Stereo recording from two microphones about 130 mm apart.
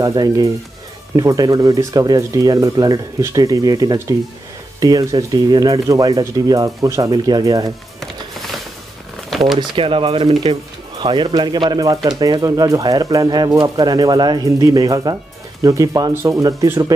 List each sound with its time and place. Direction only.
0.0 s speech: 30° right (ahead or behind)
8.0 s music: centre (ahead or behind)
9.3 s a sound: centre (ahead or behind)
9.6 s speech: 40° right (ahead or behind); by 16.9 s 25° right (ahead or behind)